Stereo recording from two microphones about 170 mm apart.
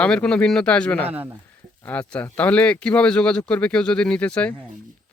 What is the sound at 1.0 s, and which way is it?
Speech, 10° right (ahead or behind).